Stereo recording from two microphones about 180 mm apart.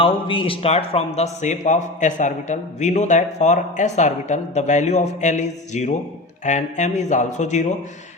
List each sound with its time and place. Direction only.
0.0 s a man's voice: 30° left (ahead or behind)